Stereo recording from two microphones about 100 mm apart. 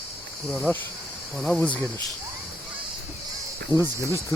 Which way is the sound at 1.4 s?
5° left (ahead or behind).